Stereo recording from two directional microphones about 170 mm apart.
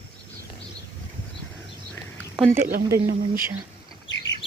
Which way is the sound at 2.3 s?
10° right (ahead or behind).